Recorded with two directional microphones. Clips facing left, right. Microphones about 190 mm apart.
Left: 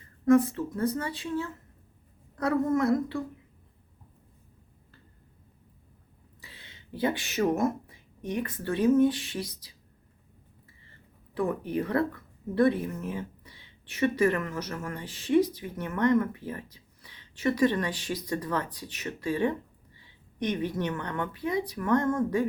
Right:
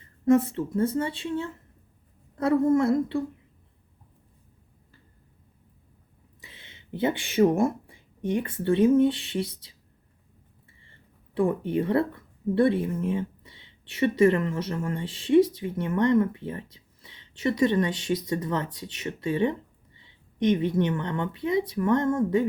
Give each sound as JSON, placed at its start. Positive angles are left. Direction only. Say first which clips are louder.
{"t": 0.3, "sound": "speech", "louder": "right 1 dB", "side_deg": -25}
{"t": 6.4, "sound": "speech", "louder": "right 1 dB", "side_deg": -20}
{"t": 11.3, "sound": "speech", "louder": "right 4 dB", "side_deg": -25}